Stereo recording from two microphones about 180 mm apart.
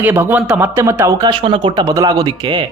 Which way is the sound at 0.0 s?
10° right (ahead or behind).